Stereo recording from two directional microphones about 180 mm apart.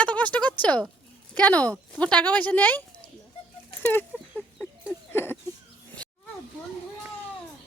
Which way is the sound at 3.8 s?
10° left (ahead or behind).